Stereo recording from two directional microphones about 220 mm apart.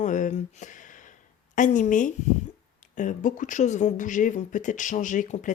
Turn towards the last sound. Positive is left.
turn(degrees=35)  # may be behind; listen again after turning